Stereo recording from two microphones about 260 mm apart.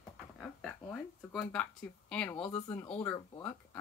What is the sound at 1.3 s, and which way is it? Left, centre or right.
A woman's voice, centre.